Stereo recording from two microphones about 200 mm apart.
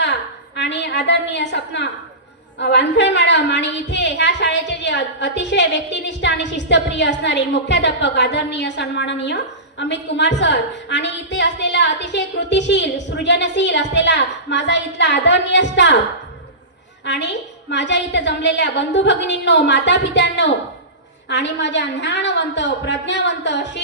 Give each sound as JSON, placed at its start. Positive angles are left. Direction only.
{"t": 0.0, "sound": "a woman's voice", "side_deg": 60}
{"t": 17.1, "sound": "a woman's voice", "side_deg": 60}